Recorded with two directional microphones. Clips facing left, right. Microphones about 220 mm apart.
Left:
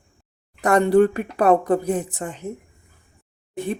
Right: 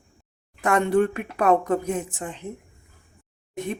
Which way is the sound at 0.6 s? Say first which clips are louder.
Left 5 dB; 40° left (ahead or behind).